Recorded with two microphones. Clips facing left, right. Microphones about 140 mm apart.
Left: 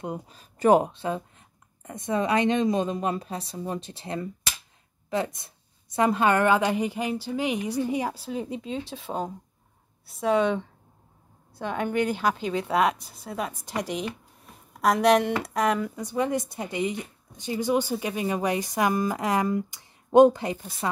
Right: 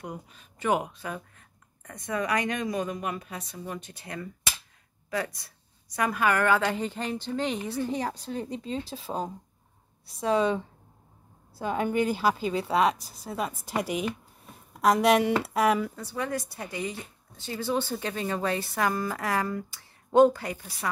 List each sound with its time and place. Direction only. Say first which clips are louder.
0.0 s a woman's voice: left 5 dB; 30° left (ahead or behind); by 15.9 s 5° right (ahead or behind)
16.0 s speech: left 5 dB; 20° left (ahead or behind)